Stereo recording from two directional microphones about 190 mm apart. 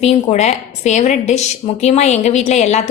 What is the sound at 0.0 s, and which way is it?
A woman's voice, 35° left (ahead or behind).